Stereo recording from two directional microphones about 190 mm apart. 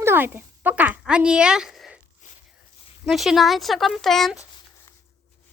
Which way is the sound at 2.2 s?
40° left (ahead or behind).